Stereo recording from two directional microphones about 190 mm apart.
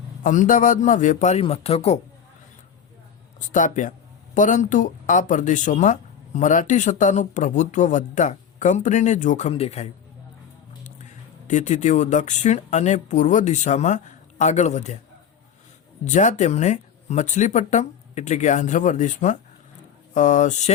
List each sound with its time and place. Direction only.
0.2 s speech: 45° left (ahead or behind)
3.4 s speech: 40° left (ahead or behind)
11.4 s speech: 40° left (ahead or behind)
16.0 s speech: 40° left (ahead or behind)